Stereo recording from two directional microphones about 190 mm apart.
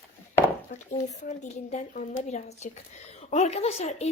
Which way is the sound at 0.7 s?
40° left (ahead or behind).